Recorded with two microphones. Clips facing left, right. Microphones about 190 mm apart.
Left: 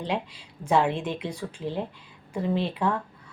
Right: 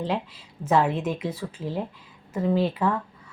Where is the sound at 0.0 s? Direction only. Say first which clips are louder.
Right 2 dB; 5° right (ahead or behind).